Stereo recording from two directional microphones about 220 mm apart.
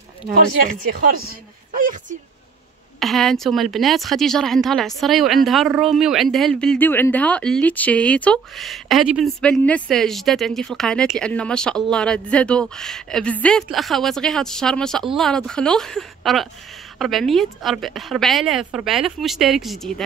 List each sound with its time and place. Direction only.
1.8 s speech: 35° right (ahead or behind)
3.0 s speech: centre (ahead or behind)